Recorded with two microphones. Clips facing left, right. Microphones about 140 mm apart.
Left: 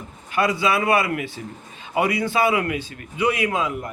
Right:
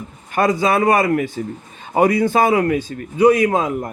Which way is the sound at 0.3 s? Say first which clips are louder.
Right 4 dB; 45° right (ahead or behind).